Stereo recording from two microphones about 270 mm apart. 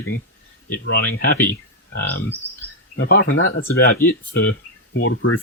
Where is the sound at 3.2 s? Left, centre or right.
Left.